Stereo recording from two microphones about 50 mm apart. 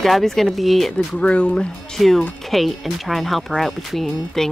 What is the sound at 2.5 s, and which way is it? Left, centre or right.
Speech, centre.